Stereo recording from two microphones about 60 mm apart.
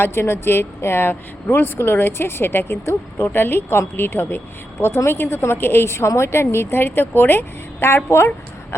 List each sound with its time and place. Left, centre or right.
0.0 s speech: left